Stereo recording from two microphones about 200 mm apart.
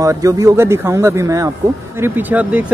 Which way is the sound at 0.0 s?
15° right (ahead or behind).